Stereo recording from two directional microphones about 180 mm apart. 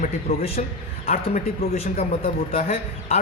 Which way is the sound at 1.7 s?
35° left (ahead or behind).